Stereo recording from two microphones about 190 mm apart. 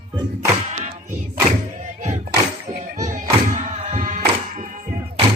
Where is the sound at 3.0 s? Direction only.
40° right (ahead or behind).